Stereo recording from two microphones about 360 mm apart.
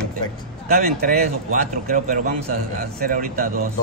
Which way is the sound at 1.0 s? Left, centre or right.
Right.